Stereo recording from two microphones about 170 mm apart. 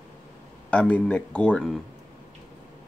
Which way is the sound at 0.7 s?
10° left (ahead or behind).